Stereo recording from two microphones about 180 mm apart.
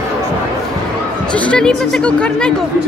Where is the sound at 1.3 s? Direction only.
5° left (ahead or behind).